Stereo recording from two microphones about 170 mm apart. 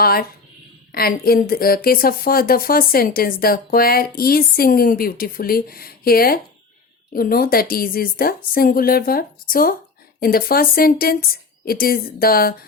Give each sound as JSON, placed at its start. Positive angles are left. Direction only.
{"t": 0.0, "sound": "speech", "side_deg": 65}